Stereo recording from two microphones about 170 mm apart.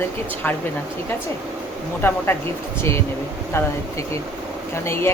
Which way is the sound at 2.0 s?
10° left (ahead or behind).